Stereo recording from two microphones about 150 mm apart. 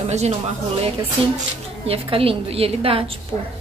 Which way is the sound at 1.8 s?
40° right (ahead or behind).